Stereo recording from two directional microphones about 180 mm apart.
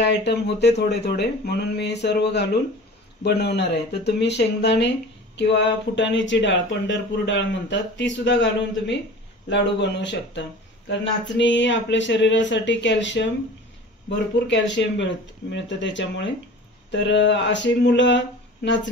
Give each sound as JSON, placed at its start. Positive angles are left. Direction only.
{"t": 0.0, "sound": "speech", "side_deg": 75}